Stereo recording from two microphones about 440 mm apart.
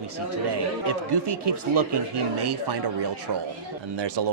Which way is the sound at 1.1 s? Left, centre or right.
Right.